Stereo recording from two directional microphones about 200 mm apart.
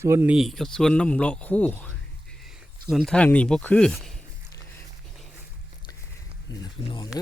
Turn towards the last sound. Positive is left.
turn(degrees=20)  # may be behind; listen again after turning